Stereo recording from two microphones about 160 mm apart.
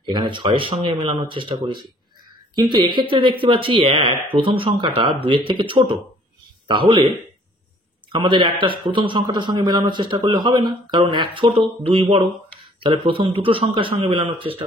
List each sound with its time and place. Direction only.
0.1 s speech: 30° right (ahead or behind)
8.1 s a man's voice: 30° right (ahead or behind)